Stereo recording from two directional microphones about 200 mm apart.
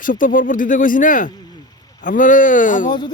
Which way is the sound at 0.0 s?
45° left (ahead or behind).